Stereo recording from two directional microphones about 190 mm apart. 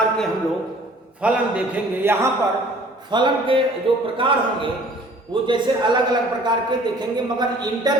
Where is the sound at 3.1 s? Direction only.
25° right (ahead or behind).